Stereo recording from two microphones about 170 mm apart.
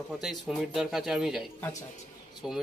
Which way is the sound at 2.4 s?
Centre (ahead or behind).